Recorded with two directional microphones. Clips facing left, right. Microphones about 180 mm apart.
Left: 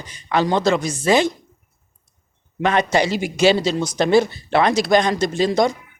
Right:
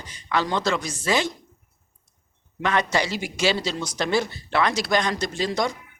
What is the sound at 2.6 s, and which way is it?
Speech, 20° left (ahead or behind).